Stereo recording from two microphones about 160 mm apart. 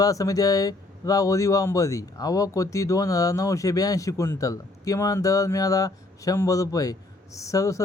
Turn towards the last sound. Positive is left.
turn(degrees=20)  # may be behind; listen again after turning